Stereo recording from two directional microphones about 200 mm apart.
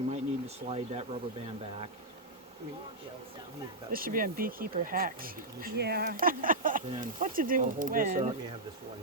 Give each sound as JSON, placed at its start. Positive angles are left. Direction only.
{"t": 0.1, "sound": "speech", "side_deg": -30}
{"t": 3.9, "sound": "speech", "side_deg": -45}